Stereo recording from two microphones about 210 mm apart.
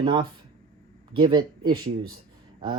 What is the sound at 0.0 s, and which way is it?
Speech, 20° right (ahead or behind).